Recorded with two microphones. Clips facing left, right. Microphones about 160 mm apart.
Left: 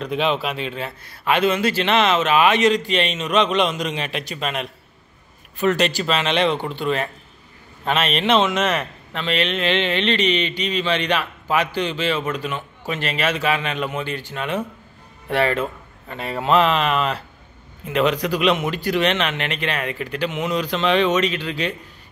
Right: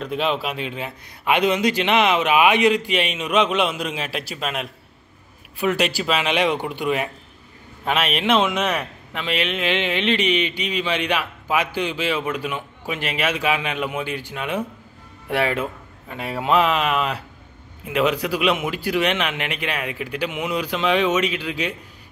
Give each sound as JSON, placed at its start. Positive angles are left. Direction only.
{"t": 0.0, "sound": "a man's voice", "side_deg": 0}